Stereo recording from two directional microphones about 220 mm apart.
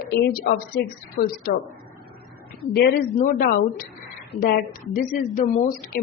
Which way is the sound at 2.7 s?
45° left (ahead or behind).